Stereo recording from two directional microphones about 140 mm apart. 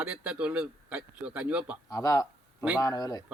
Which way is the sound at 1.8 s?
25° left (ahead or behind).